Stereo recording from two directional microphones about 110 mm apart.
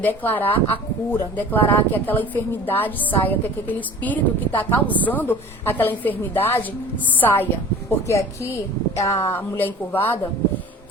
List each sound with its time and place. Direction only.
0.0 s a woman's voice: 15° left (ahead or behind)